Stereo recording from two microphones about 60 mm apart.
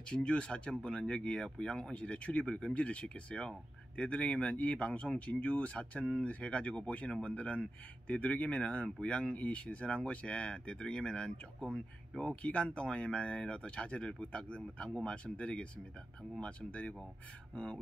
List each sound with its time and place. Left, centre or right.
0.1 s speech: centre